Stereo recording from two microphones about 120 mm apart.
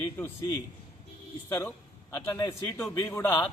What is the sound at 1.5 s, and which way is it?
A man's voice, 25° left (ahead or behind).